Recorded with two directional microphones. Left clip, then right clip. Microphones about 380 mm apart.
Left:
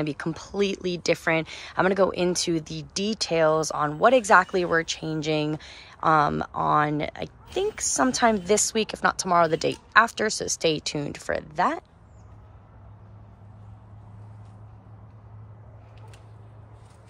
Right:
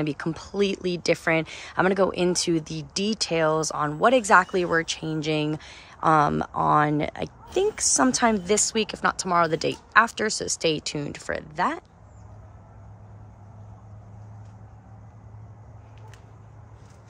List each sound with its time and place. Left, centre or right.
0.0 s speech: centre